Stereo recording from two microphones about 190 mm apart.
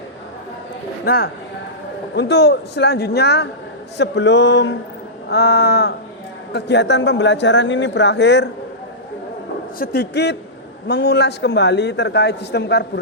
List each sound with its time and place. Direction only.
1.0 s speech: 55° left (ahead or behind)
9.7 s speech: 50° left (ahead or behind)